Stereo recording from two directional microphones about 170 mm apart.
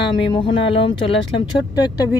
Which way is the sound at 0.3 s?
30° left (ahead or behind).